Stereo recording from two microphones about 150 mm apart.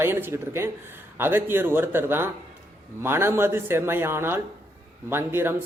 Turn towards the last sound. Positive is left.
turn(degrees=-15)  # may be behind; listen again after turning